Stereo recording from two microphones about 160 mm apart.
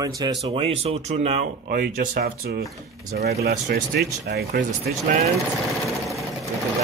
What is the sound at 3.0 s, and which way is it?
Speech, 80° right.